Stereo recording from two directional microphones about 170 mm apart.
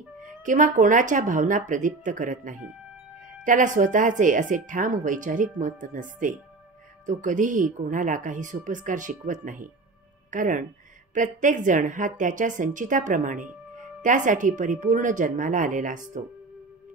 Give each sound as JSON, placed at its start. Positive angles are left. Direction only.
{"t": 0.2, "sound": "a woman's voice", "side_deg": -50}